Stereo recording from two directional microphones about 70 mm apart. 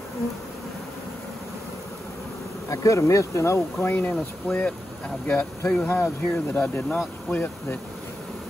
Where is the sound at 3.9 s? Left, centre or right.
Left.